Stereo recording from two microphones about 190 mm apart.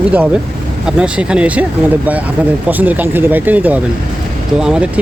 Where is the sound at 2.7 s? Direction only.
10° right (ahead or behind).